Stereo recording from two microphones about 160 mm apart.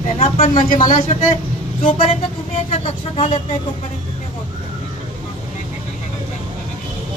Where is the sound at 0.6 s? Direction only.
55° left (ahead or behind).